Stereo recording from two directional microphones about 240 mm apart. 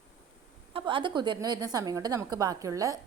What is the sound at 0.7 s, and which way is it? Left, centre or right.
A woman's voice, right.